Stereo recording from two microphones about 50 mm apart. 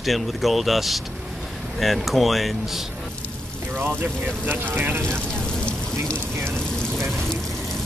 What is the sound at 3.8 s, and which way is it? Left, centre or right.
Speech, right.